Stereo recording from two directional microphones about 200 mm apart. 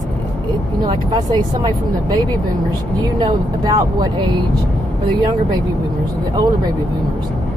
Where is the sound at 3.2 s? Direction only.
20° right (ahead or behind).